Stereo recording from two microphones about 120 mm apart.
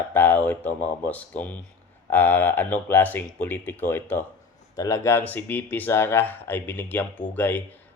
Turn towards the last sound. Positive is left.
turn(degrees=15)  # may be behind; listen again after turning